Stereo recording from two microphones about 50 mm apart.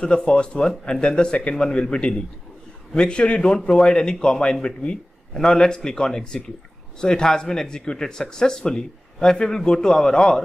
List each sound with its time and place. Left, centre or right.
0.0 s a man's voice: centre